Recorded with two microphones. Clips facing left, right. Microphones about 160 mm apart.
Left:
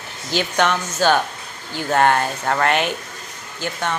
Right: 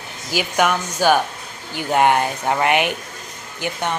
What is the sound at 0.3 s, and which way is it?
Speech, 10° right (ahead or behind).